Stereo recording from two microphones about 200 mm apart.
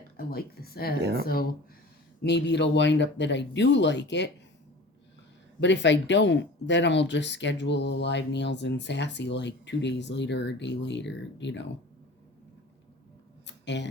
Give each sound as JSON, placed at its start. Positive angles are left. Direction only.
{"t": 0.2, "sound": "speech", "side_deg": 50}
{"t": 5.5, "sound": "speech", "side_deg": 65}
{"t": 13.5, "sound": "a sound", "side_deg": 60}